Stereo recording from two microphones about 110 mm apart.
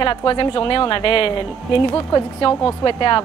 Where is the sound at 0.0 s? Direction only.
50° left (ahead or behind).